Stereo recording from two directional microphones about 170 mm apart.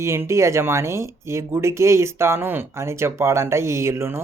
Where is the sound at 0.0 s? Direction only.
15° right (ahead or behind).